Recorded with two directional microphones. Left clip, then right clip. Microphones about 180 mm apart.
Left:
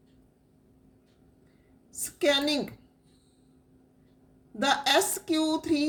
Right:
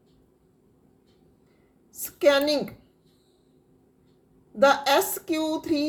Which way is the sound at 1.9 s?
5° left (ahead or behind).